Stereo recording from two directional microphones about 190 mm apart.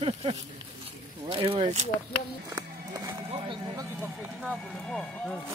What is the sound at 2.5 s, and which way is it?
Music, 25° right (ahead or behind).